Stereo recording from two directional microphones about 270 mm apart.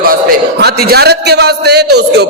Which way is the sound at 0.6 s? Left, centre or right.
Right.